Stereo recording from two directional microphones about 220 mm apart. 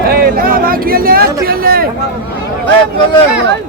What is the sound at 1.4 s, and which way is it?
Speech, 40° right (ahead or behind).